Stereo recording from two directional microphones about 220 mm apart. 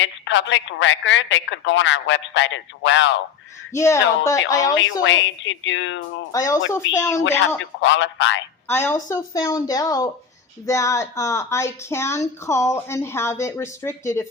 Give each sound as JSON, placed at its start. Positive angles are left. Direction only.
{"t": 0.0, "sound": "speech", "side_deg": 60}
{"t": 3.7, "sound": "a woman's voice", "side_deg": 15}
{"t": 4.8, "sound": "speech", "side_deg": 60}
{"t": 6.3, "sound": "a woman's voice", "side_deg": 15}
{"t": 6.8, "sound": "speech", "side_deg": 60}
{"t": 8.6, "sound": "a woman's voice", "side_deg": 10}